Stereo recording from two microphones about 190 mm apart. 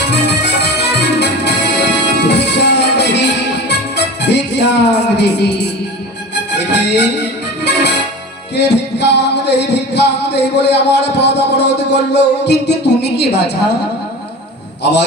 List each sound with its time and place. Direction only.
0.1 s music: 65° left (ahead or behind)